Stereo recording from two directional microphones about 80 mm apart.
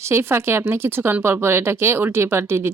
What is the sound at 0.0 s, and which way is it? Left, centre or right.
Speech, right.